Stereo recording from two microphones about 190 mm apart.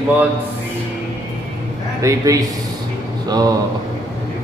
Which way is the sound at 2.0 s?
15° right (ahead or behind).